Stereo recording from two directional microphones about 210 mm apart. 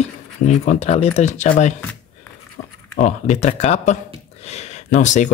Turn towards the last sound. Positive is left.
turn(degrees=35)  # may be behind; listen again after turning